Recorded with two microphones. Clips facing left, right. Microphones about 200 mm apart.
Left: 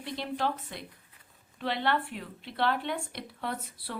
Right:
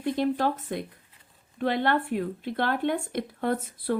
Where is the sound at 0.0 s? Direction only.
50° right (ahead or behind).